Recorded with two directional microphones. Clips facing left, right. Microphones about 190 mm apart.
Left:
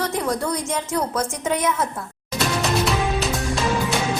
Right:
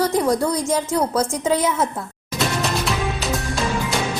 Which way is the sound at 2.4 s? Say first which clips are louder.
Left 1 dB; centre (ahead or behind).